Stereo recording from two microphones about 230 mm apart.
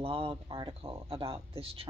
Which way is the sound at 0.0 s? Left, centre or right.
Right.